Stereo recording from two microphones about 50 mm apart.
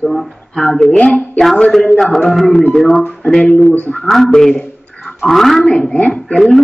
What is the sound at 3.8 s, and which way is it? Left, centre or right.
Speech, left.